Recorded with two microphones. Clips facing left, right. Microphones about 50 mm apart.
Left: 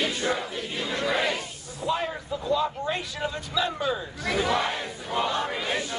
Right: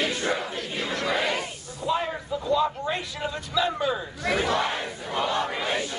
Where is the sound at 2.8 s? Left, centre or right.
Centre.